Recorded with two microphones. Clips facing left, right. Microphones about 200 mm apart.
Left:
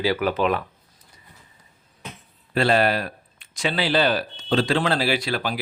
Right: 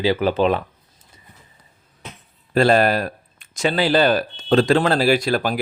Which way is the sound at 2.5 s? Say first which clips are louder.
Right 4 dB; 45° right (ahead or behind).